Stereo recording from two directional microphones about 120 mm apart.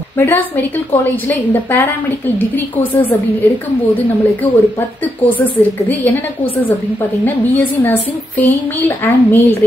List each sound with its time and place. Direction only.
0.2 s speech: 15° left (ahead or behind)